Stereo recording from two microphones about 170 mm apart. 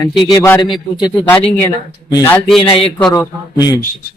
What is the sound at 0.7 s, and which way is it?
A man's voice, 25° left (ahead or behind).